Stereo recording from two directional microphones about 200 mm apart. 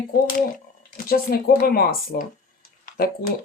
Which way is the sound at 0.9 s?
45° left (ahead or behind).